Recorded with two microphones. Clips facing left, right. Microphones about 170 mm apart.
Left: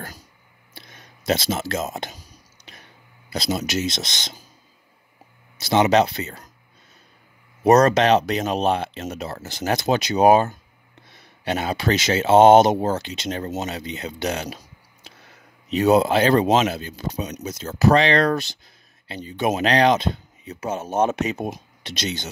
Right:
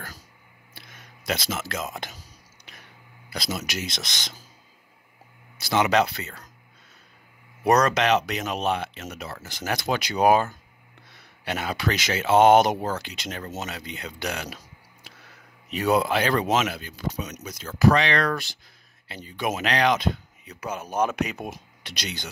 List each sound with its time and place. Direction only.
0.7 s speech: 25° left (ahead or behind)
3.3 s speech: 25° left (ahead or behind)
5.6 s speech: 20° left (ahead or behind)
7.6 s speech: 30° left (ahead or behind)